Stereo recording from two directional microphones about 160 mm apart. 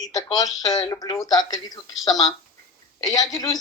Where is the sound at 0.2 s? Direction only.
25° left (ahead or behind).